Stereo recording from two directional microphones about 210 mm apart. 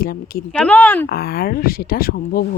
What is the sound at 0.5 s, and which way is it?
Speech, 5° left (ahead or behind).